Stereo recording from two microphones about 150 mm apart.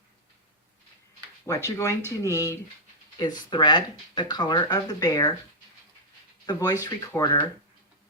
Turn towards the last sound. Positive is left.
turn(degrees=25)  # may be behind; listen again after turning